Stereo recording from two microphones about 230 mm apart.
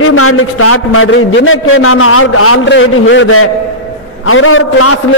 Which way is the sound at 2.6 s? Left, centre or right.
Left.